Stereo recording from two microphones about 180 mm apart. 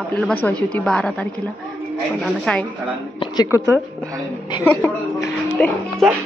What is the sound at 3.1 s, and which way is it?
Speech, 20° left (ahead or behind).